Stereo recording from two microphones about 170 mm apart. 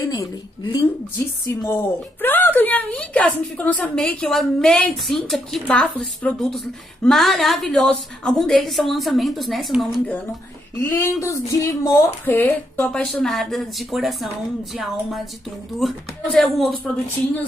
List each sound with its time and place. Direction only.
0.0 s a woman's voice: 20° left (ahead or behind)
2.2 s a woman's voice: 10° left (ahead or behind)
10.8 s a woman's voice: 15° left (ahead or behind)